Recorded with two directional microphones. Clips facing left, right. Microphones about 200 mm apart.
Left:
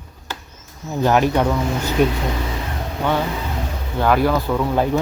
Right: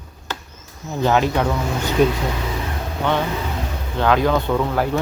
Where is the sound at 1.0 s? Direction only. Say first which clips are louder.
Left 1 dB; 10° left (ahead or behind).